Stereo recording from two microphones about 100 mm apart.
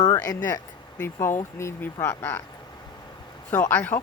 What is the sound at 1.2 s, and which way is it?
Speech, 25° left (ahead or behind).